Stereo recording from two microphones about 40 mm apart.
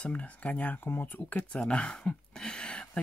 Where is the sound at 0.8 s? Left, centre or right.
Left.